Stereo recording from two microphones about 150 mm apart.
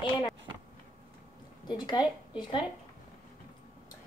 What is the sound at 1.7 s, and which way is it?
Speech, 25° left (ahead or behind).